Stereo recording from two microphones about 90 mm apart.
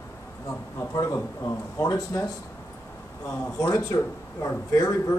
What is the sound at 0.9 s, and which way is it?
Speech, 30° left (ahead or behind).